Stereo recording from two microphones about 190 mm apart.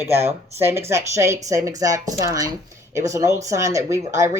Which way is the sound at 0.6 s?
15° right (ahead or behind).